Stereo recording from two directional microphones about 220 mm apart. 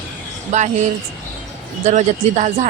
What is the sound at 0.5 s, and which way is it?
Speech, 30° right (ahead or behind).